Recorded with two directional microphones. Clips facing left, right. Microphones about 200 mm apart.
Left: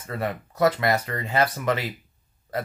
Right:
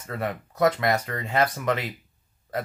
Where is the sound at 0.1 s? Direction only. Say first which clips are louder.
Left 1 dB; 5° left (ahead or behind).